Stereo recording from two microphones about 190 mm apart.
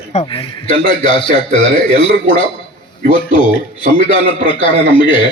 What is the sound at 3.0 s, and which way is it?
Speech, 40° right (ahead or behind).